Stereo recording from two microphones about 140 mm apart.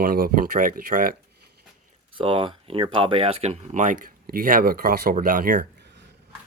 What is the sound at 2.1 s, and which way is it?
Speech, 35° right (ahead or behind).